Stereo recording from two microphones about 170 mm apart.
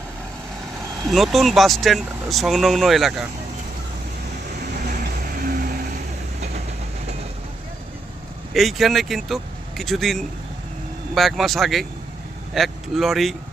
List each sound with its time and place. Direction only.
1.1 s speech: centre (ahead or behind)
5.4 s vehicle: 55° right (ahead or behind)
8.5 s speech: centre (ahead or behind)